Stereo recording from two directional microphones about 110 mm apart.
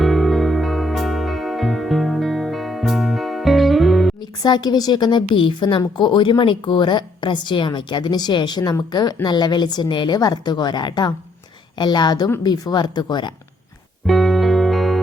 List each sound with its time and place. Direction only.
0.0 s music: centre (ahead or behind)
4.2 s a woman's voice: 40° left (ahead or behind)
14.1 s music: centre (ahead or behind)